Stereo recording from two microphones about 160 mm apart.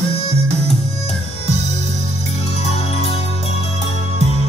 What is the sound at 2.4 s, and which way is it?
Music, 40° left (ahead or behind).